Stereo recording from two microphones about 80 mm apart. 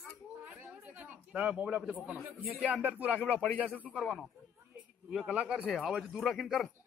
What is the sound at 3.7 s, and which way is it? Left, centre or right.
Speech, centre.